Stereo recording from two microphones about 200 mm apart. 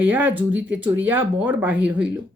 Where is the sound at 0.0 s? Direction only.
10° right (ahead or behind).